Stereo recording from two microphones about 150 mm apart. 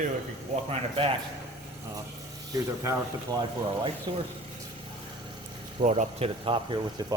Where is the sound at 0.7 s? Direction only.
40° right (ahead or behind).